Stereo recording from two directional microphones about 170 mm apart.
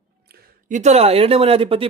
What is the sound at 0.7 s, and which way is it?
Speech, 45° right (ahead or behind).